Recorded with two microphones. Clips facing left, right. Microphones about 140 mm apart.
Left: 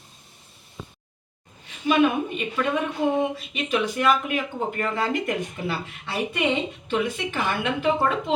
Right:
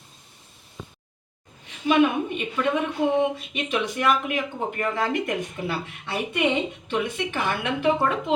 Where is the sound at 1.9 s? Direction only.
20° right (ahead or behind).